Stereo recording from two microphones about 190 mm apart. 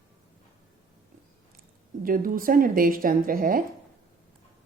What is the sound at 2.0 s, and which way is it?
Speech, 45° right (ahead or behind).